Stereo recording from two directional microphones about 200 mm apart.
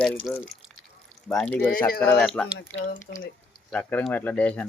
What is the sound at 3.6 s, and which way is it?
Speech, 5° left (ahead or behind).